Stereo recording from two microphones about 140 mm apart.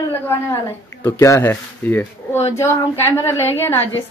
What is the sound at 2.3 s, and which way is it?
Speech, 50° left (ahead or behind).